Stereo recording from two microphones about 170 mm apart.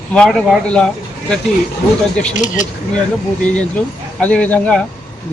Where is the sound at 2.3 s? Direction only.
45° left (ahead or behind).